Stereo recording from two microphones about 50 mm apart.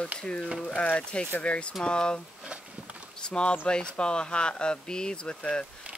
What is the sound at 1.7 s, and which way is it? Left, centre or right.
Speech, centre.